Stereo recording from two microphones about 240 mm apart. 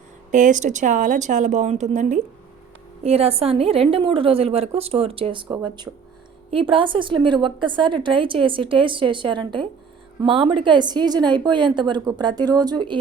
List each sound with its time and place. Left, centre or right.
0.3 s a woman's voice: right